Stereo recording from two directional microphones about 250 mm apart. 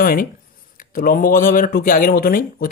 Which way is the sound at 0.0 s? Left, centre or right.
Left.